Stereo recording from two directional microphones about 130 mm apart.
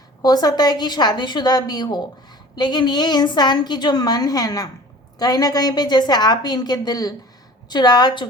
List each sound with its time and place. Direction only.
0.2 s a woman's voice: 30° left (ahead or behind)